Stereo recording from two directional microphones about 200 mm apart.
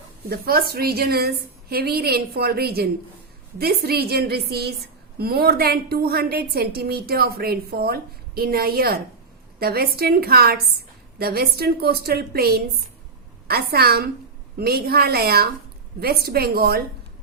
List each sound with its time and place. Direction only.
0.3 s a woman's voice: 50° right (ahead or behind)